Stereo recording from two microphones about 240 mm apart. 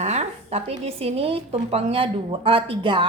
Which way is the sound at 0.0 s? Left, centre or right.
Right.